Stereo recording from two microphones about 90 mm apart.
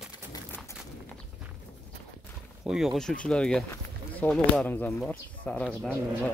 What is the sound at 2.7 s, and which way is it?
Speech, centre (ahead or behind).